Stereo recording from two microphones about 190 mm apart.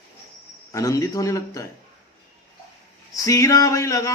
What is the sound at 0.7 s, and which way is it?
Speech, 15° left (ahead or behind).